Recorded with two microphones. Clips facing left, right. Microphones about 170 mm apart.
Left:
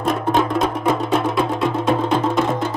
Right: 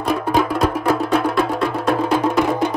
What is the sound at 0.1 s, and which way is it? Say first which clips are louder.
Music: right 1 dB; 5° right (ahead or behind).